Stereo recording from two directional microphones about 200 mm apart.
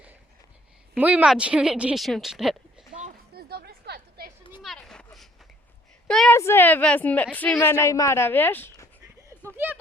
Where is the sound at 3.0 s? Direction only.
45° right (ahead or behind).